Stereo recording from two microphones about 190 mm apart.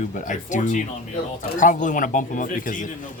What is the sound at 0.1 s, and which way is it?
A man's voice, 40° left (ahead or behind).